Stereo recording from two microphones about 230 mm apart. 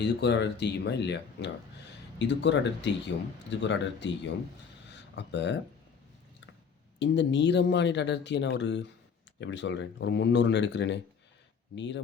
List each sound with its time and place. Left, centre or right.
0.0 s speech: left
7.0 s speech: left